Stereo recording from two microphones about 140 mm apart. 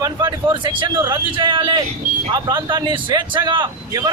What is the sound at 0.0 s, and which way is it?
A man's voice, 30° right (ahead or behind).